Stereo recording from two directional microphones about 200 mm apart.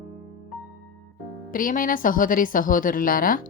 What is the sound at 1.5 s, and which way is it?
Speech, 45° left (ahead or behind).